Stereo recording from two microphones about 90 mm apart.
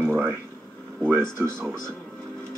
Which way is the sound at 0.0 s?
25° right (ahead or behind).